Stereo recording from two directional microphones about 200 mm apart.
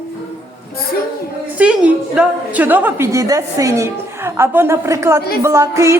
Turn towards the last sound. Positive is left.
turn(degrees=-15)  # may be behind; listen again after turning